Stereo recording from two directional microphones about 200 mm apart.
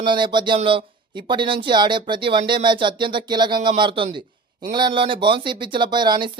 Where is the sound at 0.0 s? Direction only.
25° right (ahead or behind).